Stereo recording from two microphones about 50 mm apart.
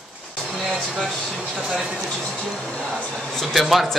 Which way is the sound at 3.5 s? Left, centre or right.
Centre.